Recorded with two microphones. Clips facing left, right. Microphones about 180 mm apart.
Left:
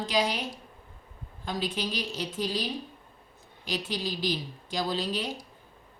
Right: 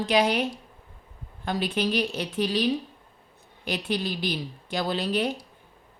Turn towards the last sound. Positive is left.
turn(degrees=-60)  # may be behind; listen again after turning